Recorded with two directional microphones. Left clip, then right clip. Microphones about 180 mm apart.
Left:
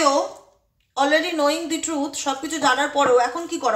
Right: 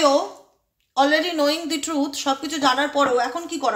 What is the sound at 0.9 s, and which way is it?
Speech, 30° right (ahead or behind).